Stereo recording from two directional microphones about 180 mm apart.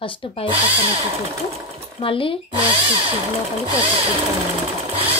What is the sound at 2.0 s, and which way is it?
Speech, 30° left (ahead or behind).